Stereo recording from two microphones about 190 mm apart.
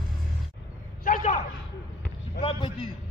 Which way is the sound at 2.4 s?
30° left (ahead or behind).